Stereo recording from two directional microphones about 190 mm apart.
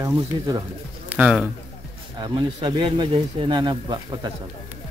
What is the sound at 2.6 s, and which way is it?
Speech, 25° right (ahead or behind).